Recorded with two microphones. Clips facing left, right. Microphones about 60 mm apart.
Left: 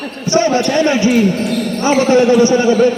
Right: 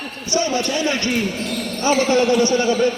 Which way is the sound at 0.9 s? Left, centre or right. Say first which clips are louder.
Left 9 dB; centre.